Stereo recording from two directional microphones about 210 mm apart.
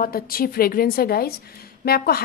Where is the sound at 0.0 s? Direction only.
45° left (ahead or behind).